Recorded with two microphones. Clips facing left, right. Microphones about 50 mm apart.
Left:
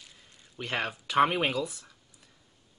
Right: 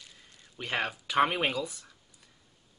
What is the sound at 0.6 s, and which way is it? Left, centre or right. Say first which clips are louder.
Speech: even; centre.